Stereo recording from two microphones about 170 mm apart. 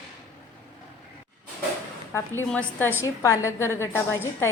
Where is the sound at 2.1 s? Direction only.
10° left (ahead or behind).